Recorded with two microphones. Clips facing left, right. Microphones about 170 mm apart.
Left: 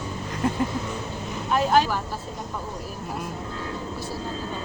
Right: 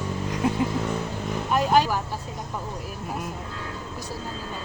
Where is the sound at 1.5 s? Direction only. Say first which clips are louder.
Even; 10° right (ahead or behind).